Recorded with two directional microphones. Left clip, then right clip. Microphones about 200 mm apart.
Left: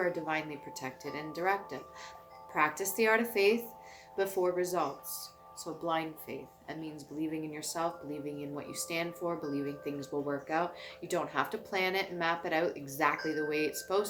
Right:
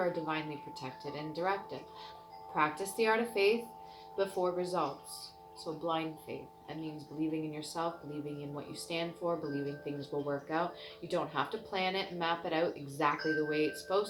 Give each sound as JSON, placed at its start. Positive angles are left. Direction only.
{"t": 0.3, "sound": "speech", "side_deg": 20}